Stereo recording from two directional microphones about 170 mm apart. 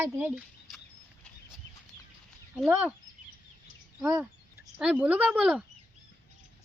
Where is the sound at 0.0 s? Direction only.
10° right (ahead or behind).